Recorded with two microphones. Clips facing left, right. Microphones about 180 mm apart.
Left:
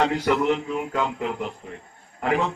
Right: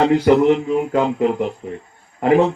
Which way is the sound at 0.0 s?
35° right (ahead or behind).